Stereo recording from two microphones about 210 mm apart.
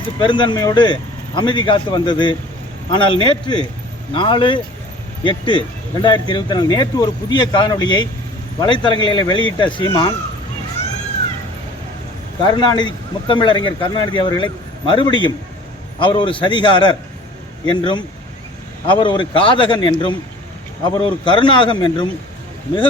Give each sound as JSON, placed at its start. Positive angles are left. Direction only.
{"t": 0.2, "sound": "speech", "side_deg": 20}
{"t": 12.4, "sound": "speech", "side_deg": 20}